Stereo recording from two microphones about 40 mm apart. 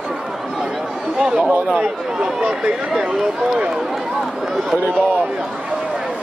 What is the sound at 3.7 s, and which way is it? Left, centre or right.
Run, centre.